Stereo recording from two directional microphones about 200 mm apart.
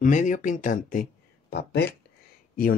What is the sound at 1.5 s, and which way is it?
Speech, 55° left (ahead or behind).